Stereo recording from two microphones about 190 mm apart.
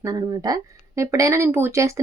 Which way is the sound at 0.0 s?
20° right (ahead or behind).